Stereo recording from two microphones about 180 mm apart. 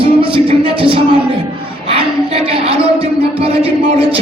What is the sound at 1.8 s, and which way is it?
Speech, 30° right (ahead or behind).